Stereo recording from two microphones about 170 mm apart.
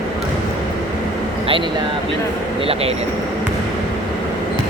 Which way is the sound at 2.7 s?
35° right (ahead or behind).